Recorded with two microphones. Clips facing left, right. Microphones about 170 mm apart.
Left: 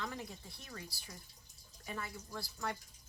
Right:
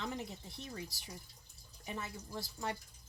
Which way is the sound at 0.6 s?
20° right (ahead or behind).